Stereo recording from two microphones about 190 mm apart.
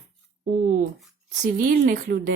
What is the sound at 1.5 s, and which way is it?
Speech, 40° right (ahead or behind).